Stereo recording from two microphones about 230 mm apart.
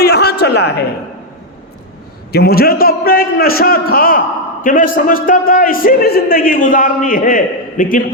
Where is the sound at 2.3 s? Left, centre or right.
Left.